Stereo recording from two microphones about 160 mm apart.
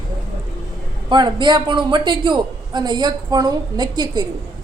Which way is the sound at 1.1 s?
30° right (ahead or behind).